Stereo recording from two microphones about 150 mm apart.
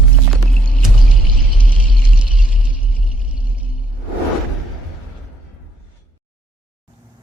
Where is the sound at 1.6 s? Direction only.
5° right (ahead or behind).